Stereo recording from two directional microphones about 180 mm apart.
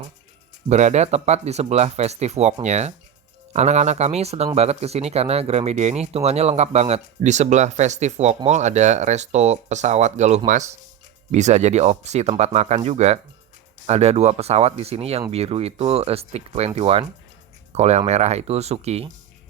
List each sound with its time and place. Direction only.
0.7 s speech: 40° right (ahead or behind)